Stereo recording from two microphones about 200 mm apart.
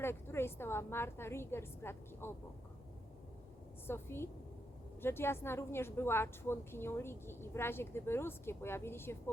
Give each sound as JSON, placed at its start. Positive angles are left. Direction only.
{"t": 0.0, "sound": "a woman's voice", "side_deg": 10}
{"t": 3.8, "sound": "a woman's voice", "side_deg": 10}